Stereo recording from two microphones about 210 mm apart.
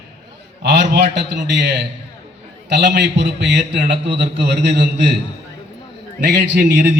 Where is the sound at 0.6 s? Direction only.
55° right (ahead or behind).